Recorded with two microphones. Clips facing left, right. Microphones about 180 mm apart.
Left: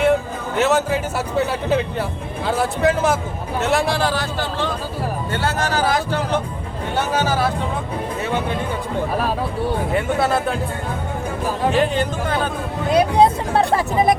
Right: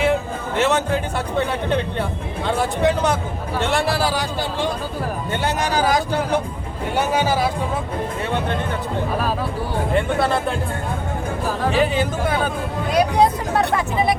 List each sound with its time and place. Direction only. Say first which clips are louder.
0.0 s a man's voice: left 2 dB; centre (ahead or behind)
9.9 s speech: right 2 dB; 5° left (ahead or behind)
11.7 s speech: right 1 dB; 5° right (ahead or behind)
12.9 s speech: left 2 dB; 25° left (ahead or behind)